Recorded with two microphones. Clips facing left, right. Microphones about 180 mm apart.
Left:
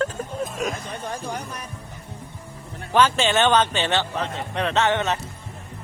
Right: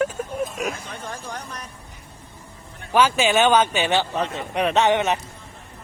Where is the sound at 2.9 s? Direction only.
10° right (ahead or behind).